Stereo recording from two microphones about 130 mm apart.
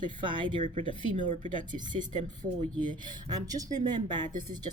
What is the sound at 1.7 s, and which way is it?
Speech, 85° right.